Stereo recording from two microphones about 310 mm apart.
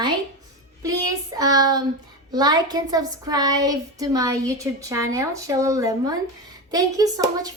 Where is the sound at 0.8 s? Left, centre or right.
Centre.